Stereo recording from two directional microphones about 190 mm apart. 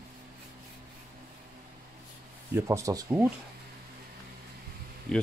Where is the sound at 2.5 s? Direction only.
15° right (ahead or behind).